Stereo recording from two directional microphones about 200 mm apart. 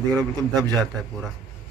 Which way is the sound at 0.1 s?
15° right (ahead or behind).